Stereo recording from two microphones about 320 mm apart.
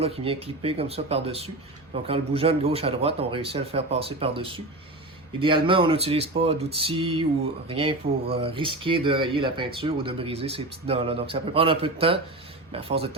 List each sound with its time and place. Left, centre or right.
0.0 s speech: centre